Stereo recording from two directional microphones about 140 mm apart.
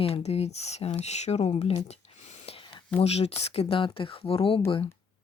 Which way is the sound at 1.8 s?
50° left (ahead or behind).